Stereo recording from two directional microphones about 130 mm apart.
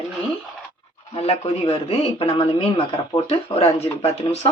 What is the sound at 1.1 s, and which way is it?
Speech, 50° left (ahead or behind).